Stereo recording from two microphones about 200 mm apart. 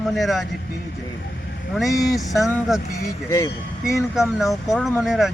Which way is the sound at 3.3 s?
15° left (ahead or behind).